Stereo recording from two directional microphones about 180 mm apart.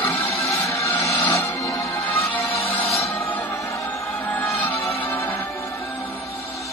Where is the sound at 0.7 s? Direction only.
15° left (ahead or behind).